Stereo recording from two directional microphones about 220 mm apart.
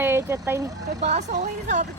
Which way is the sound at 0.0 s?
10° right (ahead or behind).